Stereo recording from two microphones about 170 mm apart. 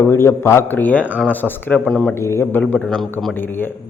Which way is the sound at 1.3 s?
10° left (ahead or behind).